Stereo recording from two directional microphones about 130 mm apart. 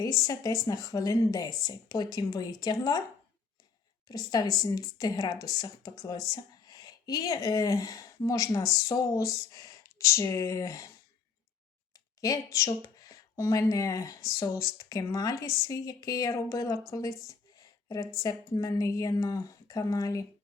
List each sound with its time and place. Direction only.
0.0 s speech: 25° left (ahead or behind)
4.1 s speech: 30° left (ahead or behind)
12.2 s speech: 25° left (ahead or behind)
17.2 s a sound: 30° left (ahead or behind)
18.2 s speech: 30° left (ahead or behind)